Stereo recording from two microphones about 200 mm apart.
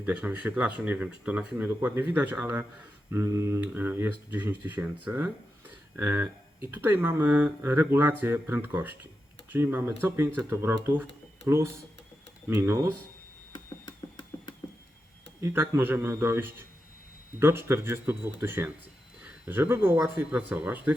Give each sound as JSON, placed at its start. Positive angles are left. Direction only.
{"t": 0.0, "sound": "speech", "side_deg": -10}
{"t": 13.5, "sound": "a sound", "side_deg": 20}
{"t": 15.4, "sound": "speech", "side_deg": -15}